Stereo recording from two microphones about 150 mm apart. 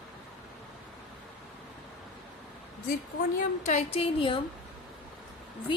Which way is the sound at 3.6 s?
45° left (ahead or behind).